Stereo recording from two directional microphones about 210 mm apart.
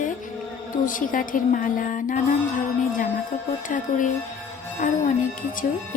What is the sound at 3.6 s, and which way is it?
Speech, 40° left (ahead or behind).